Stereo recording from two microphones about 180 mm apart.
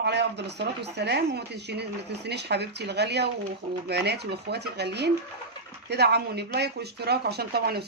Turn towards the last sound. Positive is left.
turn(degrees=-60)  # may be behind; listen again after turning